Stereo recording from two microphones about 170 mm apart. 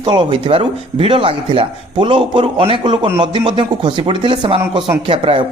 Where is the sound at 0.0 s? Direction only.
30° right (ahead or behind).